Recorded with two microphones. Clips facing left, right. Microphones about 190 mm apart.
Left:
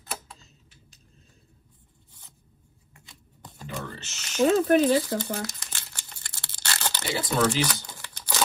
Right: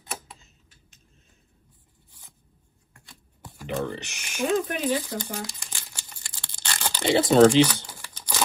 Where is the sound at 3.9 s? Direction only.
15° right (ahead or behind).